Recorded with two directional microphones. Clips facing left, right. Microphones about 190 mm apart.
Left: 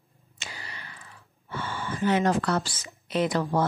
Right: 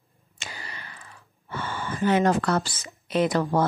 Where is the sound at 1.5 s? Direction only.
50° right (ahead or behind).